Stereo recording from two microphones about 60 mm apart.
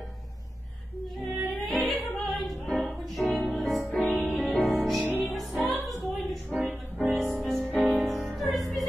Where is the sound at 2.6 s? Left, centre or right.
Left.